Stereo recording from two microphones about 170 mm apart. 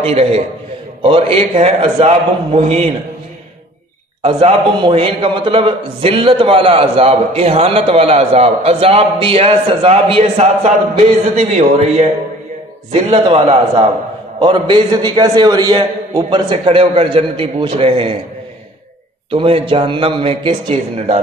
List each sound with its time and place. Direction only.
0.0 s a man's voice: 35° right (ahead or behind)
4.2 s a man's voice: 35° right (ahead or behind)
19.3 s a man's voice: 30° right (ahead or behind)